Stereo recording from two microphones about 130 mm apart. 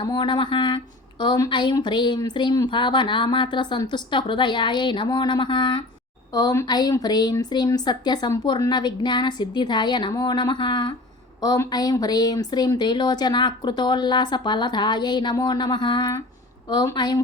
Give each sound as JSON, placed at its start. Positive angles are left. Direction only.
{"t": 0.0, "sound": "speech", "side_deg": 35}